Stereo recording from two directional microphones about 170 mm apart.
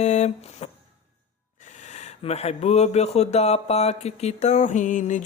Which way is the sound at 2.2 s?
40° left (ahead or behind).